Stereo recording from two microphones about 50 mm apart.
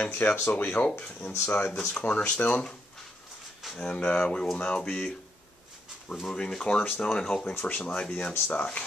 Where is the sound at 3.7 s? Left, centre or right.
Centre.